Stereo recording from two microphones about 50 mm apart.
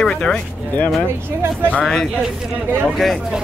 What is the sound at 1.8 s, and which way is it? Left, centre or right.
A man's voice, centre.